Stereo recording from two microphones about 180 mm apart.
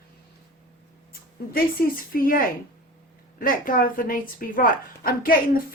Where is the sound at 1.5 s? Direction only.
55° left (ahead or behind).